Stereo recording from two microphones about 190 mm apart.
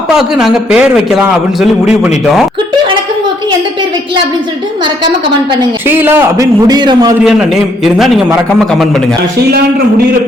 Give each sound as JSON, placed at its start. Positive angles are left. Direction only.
{"t": 0.1, "sound": "a man's voice", "side_deg": -5}
{"t": 5.8, "sound": "a man's voice", "side_deg": -10}
{"t": 7.3, "sound": "a man's voice", "side_deg": 0}